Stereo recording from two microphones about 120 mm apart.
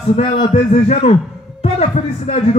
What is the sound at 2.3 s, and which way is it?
Speech, 60° left (ahead or behind).